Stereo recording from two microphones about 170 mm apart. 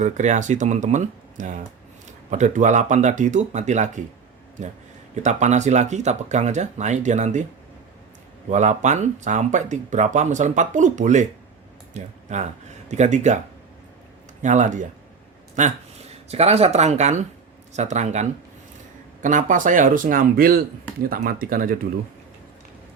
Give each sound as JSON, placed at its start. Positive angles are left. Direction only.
{"t": 0.0, "sound": "speech", "side_deg": -45}
{"t": 5.1, "sound": "speech", "side_deg": -45}
{"t": 8.4, "sound": "speech", "side_deg": -45}
{"t": 14.4, "sound": "speech", "side_deg": -45}